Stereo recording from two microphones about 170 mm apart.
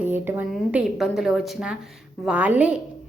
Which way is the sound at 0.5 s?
Centre (ahead or behind).